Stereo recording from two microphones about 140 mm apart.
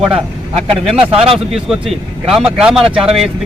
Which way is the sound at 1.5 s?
Centre (ahead or behind).